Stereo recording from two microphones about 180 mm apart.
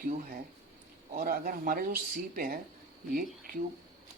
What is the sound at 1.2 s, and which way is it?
Speech, 50° right (ahead or behind).